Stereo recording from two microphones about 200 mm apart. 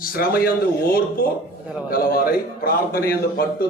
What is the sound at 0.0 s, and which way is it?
A man's voice, 45° left (ahead or behind).